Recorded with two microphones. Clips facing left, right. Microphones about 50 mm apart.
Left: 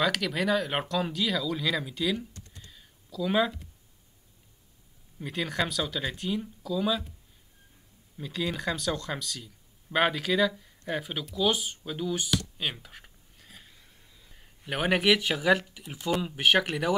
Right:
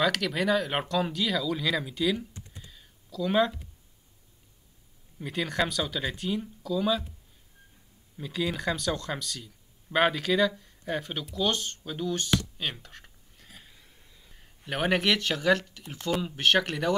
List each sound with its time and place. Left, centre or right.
0.0 s speech: centre
2.3 s computer keyboard: centre
2.7 s a sound: centre
5.2 s speech: centre
8.2 s speech: centre
12.4 s a sound: centre
15.9 s speech: centre